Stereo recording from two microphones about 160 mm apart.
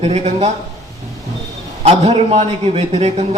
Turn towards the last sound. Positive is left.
turn(degrees=-40)  # may be behind; listen again after turning